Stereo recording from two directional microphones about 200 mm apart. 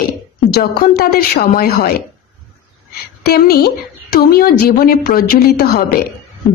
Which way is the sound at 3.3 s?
50° left (ahead or behind).